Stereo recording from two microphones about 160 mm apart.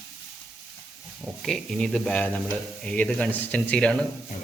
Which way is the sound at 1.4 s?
Centre (ahead or behind).